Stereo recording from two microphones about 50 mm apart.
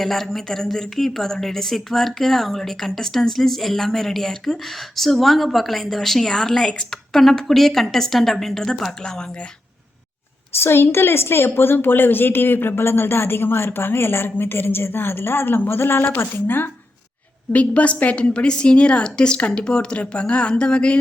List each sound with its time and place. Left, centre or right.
0.0 s a woman's voice: centre
10.6 s a woman's voice: left
17.5 s a woman's voice: left